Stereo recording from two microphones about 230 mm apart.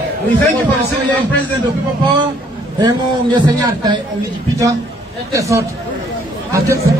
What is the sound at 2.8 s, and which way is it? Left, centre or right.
A man's voice, centre.